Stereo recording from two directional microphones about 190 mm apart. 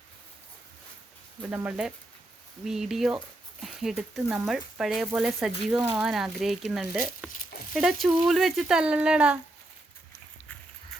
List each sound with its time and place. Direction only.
1.4 s speech: 5° right (ahead or behind)
7.3 s a sound: 45° left (ahead or behind)
7.7 s speech: centre (ahead or behind)